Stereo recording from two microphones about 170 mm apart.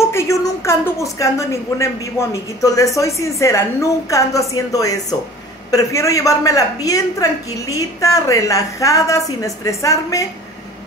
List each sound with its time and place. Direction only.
0.1 s a woman's voice: 15° left (ahead or behind)